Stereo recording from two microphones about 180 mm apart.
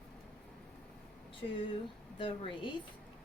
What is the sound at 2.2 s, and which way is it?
Speech, 30° left (ahead or behind).